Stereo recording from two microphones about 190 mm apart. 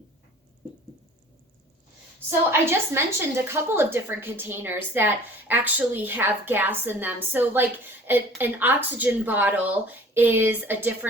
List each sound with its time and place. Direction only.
2.5 s a woman's voice: 10° right (ahead or behind)